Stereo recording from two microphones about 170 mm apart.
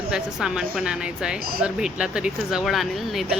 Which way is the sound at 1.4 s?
60° right (ahead or behind).